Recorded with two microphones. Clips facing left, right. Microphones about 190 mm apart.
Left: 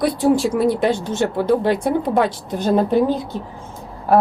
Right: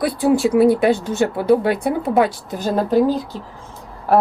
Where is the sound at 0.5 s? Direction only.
60° right (ahead or behind).